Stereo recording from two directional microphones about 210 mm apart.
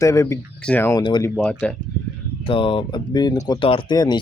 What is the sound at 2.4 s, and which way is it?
Speech, 25° left (ahead or behind).